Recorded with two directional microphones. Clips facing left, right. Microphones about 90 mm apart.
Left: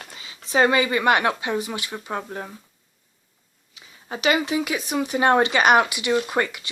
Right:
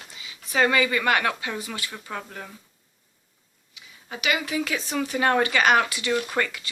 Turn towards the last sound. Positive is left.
turn(degrees=20)  # may be behind; listen again after turning